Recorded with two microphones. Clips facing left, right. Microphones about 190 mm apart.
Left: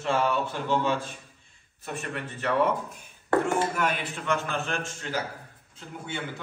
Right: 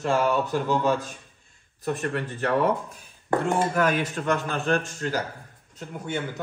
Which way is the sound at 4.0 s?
40° right (ahead or behind).